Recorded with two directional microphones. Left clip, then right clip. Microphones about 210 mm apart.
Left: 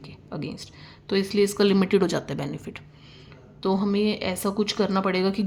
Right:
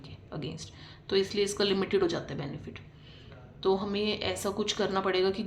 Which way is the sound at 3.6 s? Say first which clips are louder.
Left 4 dB; 30° left (ahead or behind).